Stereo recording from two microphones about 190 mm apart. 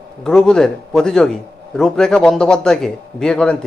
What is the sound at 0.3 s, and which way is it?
A man's voice, 5° left (ahead or behind).